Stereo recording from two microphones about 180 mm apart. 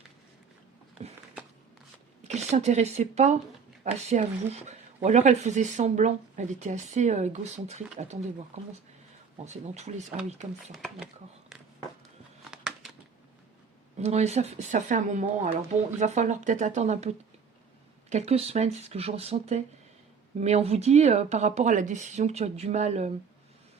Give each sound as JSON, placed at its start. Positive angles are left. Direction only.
{"t": 2.2, "sound": "speech", "side_deg": -40}
{"t": 10.7, "sound": "speech", "side_deg": 0}
{"t": 12.5, "sound": "a sound", "side_deg": 0}
{"t": 14.0, "sound": "speech", "side_deg": -35}